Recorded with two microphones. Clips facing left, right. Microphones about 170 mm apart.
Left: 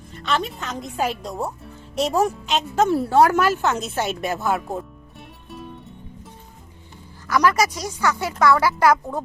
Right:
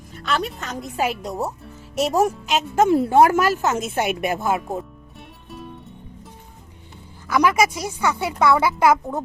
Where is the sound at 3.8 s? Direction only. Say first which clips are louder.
Right 2 dB; 50° right (ahead or behind).